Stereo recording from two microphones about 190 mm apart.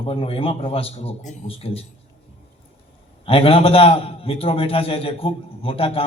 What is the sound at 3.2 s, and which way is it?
A man's voice, 30° left (ahead or behind).